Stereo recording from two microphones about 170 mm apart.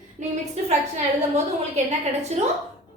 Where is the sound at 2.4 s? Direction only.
45° right (ahead or behind).